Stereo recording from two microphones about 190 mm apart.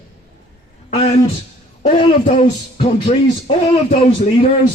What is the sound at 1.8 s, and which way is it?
Speech, 40° left (ahead or behind).